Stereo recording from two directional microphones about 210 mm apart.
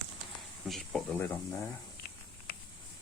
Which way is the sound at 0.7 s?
Centre (ahead or behind).